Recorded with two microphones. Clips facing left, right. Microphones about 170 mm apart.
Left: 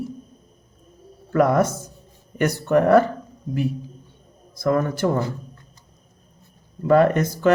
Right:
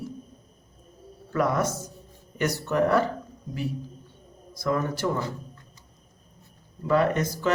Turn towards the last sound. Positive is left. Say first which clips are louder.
# left 6 dB
turn(degrees=55)  # may be behind; listen again after turning